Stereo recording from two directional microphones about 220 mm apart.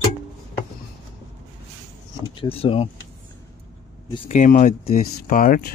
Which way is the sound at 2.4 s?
25° left (ahead or behind).